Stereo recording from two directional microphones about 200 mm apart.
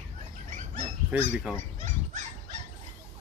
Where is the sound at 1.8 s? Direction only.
40° right (ahead or behind).